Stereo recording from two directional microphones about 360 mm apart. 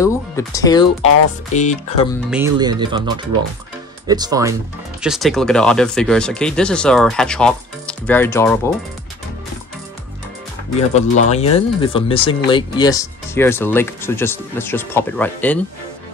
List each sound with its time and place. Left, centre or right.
0.0 s speech: centre
2.3 s speech: centre
4.1 s speech: centre
11.0 s speech: centre